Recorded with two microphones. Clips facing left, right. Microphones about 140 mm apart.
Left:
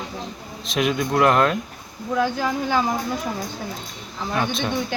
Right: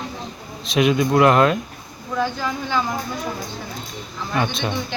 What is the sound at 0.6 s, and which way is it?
Speech, centre (ahead or behind).